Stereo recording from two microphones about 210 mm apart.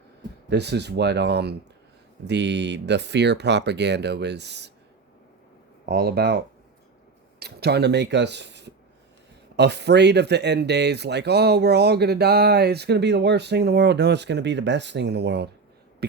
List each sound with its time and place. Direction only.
0.5 s speech: 55° right (ahead or behind)
5.8 s speech: 50° right (ahead or behind)